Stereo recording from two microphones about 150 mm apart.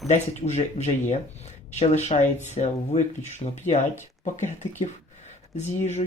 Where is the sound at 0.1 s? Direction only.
50° left (ahead or behind).